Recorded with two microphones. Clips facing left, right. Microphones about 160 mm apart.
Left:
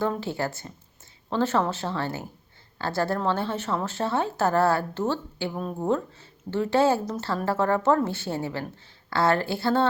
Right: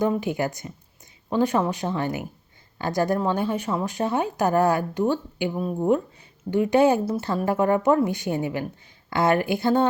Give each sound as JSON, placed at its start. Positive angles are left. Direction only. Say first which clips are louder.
{"t": 0.0, "sound": "a woman's voice", "louder": "right 4 dB", "side_deg": -15}